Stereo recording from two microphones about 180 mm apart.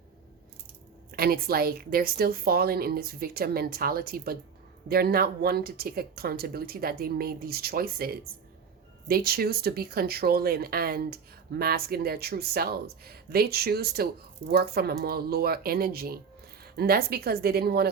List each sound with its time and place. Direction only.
1.1 s speech: 55° right (ahead or behind)